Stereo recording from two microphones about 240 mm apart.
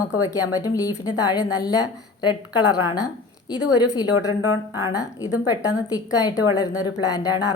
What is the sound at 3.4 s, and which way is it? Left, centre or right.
Speech, centre.